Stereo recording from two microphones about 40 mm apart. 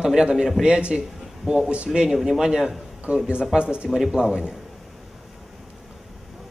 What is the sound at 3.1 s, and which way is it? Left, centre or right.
A man's voice, right.